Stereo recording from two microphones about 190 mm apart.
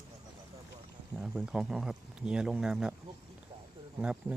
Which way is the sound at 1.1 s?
Centre (ahead or behind).